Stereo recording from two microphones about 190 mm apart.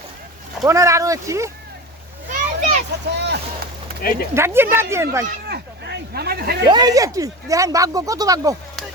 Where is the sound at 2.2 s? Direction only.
40° right (ahead or behind).